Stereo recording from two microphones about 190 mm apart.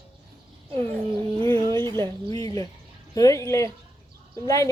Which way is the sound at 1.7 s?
25° right (ahead or behind).